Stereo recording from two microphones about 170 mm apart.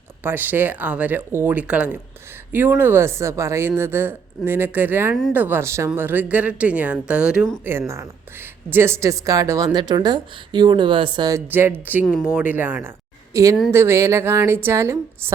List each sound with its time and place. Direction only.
0.2 s speech: 10° right (ahead or behind)